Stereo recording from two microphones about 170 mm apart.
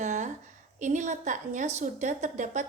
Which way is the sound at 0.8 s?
45° right (ahead or behind).